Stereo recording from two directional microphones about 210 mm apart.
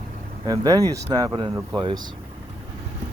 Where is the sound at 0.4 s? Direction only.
15° right (ahead or behind).